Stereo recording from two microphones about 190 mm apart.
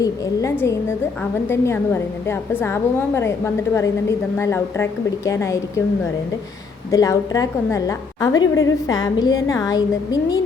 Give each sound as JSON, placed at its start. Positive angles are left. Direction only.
{"t": 0.0, "sound": "a woman's voice", "side_deg": 15}
{"t": 6.9, "sound": "a woman's voice", "side_deg": 20}